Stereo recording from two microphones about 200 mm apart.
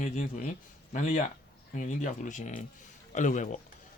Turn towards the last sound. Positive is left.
turn(degrees=40)  # may be behind; listen again after turning